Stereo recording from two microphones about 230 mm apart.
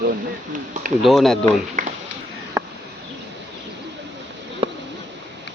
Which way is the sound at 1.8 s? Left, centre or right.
Right.